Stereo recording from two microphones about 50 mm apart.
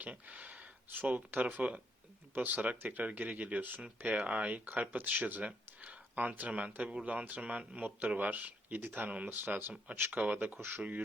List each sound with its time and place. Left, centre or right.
0.0 s speech: right
3.8 s speech: right
5.4 s speech: right
9.3 s speech: right